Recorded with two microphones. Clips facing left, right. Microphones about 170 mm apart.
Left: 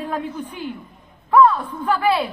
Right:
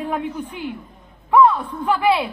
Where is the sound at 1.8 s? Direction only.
15° right (ahead or behind).